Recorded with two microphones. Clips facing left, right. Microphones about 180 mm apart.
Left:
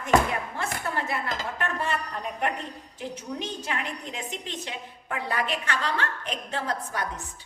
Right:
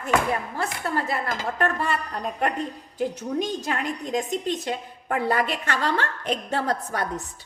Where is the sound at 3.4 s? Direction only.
40° right (ahead or behind).